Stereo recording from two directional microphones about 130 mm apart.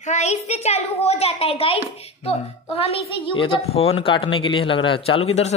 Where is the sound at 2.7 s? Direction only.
45° left (ahead or behind).